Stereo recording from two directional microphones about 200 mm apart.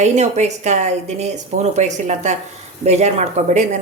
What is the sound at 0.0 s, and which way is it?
Speech, 35° right (ahead or behind).